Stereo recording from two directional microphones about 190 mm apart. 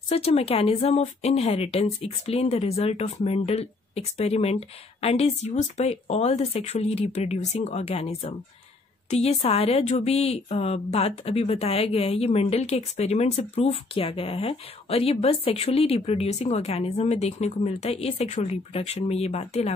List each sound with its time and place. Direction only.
0.1 s speech: 30° left (ahead or behind)